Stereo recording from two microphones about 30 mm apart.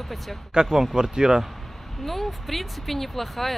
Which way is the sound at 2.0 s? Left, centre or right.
Centre.